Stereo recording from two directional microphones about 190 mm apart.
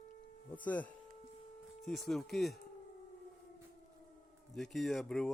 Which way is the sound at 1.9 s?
Centre (ahead or behind).